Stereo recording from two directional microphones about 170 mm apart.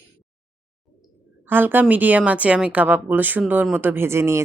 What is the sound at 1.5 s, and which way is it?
Speech, 10° right (ahead or behind).